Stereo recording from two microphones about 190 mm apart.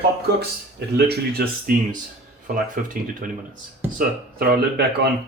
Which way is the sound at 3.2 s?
45° right (ahead or behind).